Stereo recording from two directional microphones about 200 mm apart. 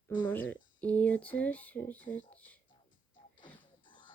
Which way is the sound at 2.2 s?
10° left (ahead or behind).